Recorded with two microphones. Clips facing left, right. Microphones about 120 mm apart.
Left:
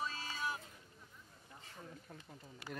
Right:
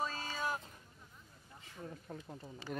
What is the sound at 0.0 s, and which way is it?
Vehicle, 45° right (ahead or behind).